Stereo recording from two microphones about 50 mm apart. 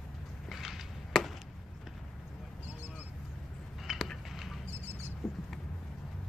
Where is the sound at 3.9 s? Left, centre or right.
Centre.